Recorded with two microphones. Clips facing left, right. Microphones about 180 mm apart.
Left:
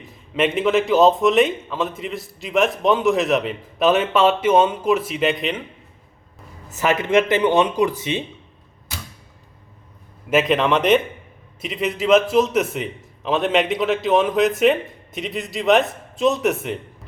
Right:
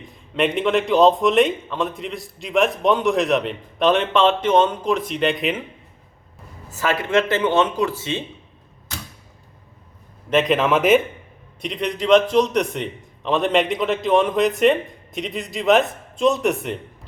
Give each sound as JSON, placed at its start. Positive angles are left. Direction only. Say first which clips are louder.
{"t": 0.3, "sound": "a man's voice", "louder": "left 1 dB", "side_deg": 0}
{"t": 6.7, "sound": "speech", "louder": "left 2 dB", "side_deg": 20}
{"t": 10.2, "sound": "a man's voice", "louder": "even", "side_deg": 5}